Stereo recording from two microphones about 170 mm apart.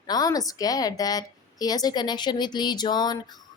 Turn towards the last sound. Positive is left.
turn(degrees=25)  # may be behind; listen again after turning